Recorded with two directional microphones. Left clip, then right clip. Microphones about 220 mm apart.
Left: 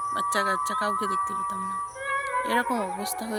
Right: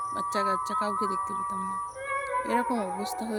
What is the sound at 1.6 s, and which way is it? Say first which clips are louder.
Music: left 2 dB; 50° right (ahead or behind).